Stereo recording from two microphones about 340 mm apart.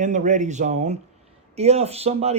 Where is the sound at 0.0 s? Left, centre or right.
Right.